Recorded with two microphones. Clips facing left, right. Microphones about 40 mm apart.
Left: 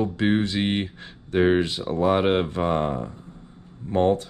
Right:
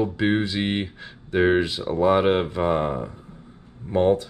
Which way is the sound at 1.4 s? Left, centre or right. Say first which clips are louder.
Right 1 dB; centre.